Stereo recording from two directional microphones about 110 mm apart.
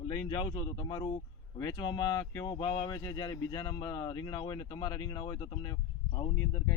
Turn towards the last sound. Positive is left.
turn(degrees=30)  # may be behind; listen again after turning